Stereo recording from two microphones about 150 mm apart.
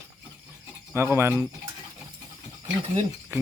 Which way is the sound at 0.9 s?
15° right (ahead or behind).